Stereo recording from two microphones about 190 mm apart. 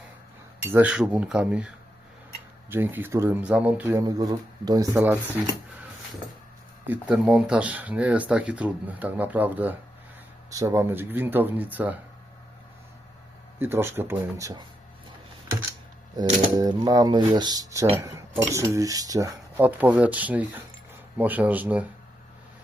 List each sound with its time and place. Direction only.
0.7 s speech: 5° right (ahead or behind)
6.8 s speech: 10° right (ahead or behind)
13.6 s speech: 10° right (ahead or behind)
16.6 s speech: 20° right (ahead or behind)